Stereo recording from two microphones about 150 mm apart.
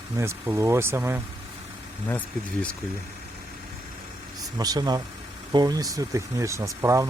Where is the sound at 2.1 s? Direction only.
10° left (ahead or behind).